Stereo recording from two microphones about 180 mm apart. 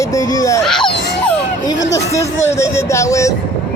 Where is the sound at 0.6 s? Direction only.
5° left (ahead or behind).